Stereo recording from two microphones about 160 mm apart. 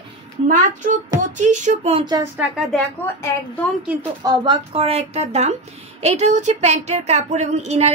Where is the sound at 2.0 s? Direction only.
25° right (ahead or behind).